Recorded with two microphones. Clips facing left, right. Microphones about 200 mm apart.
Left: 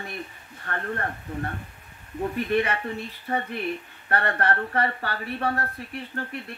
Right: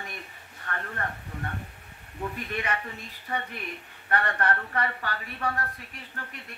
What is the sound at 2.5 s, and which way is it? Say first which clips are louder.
Speech: left 9 dB; 35° left (ahead or behind).